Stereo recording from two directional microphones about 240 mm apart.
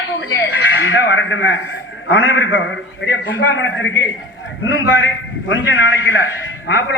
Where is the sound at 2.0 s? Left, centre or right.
Left.